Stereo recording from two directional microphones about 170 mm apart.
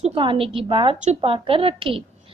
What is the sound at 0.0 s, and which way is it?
A woman's voice, 30° right (ahead or behind).